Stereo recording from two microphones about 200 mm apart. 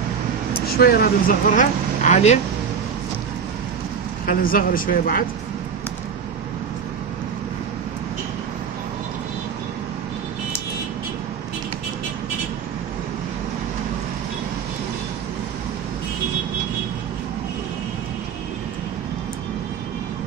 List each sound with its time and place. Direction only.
0.7 s speech: 50° left (ahead or behind); by 2.3 s 35° left (ahead or behind)
4.3 s speech: 45° left (ahead or behind)